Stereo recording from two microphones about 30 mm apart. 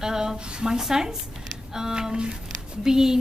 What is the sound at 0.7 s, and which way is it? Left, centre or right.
Speech, centre.